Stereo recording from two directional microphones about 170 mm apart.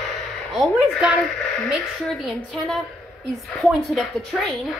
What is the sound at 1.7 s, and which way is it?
A woman's voice, centre (ahead or behind).